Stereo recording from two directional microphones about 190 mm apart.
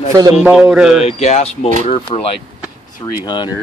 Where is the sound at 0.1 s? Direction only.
15° right (ahead or behind).